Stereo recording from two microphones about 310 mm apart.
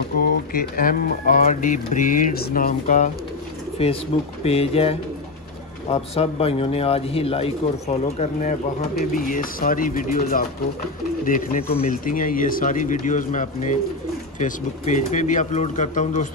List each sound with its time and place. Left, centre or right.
0.5 s speech: left